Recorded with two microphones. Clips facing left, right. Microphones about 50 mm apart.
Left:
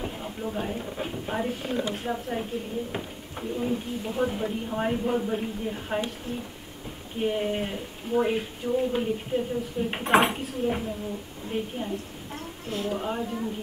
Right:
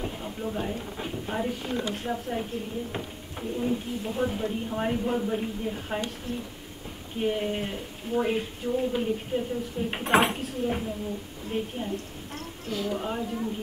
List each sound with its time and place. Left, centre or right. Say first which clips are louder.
0.0 s a sound: even; centre
0.7 s speech: left 2 dB; centre
7.2 s speech: left 1 dB; centre
12.6 s a woman's voice: even; left
12.9 s speech: left 1 dB; centre